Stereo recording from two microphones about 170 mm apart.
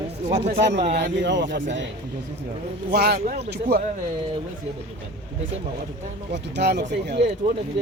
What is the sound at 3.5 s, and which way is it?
Speech, 70° right (ahead or behind).